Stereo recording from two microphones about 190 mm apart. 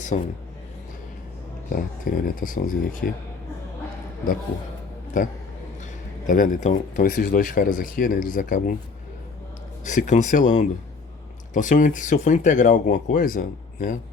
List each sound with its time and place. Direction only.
0.1 s speech: 40° left (ahead or behind)
1.7 s speech: 45° left (ahead or behind)
6.2 s speech: 45° left (ahead or behind)
9.8 s speech: 40° left (ahead or behind)